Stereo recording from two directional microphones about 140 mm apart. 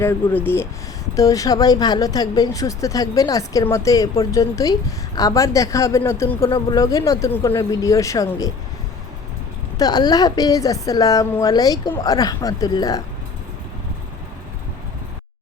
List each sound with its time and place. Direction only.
0.0 s speech: 15° left (ahead or behind)
9.7 s speech: 30° left (ahead or behind)